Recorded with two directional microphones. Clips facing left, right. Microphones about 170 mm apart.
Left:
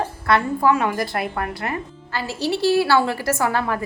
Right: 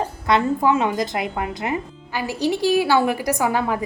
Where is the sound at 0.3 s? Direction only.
20° right (ahead or behind).